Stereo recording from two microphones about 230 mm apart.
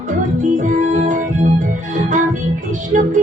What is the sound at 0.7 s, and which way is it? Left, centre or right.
Music, right.